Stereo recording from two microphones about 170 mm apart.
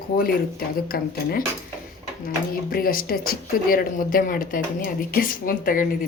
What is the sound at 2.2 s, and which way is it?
Speech, 60° left (ahead or behind).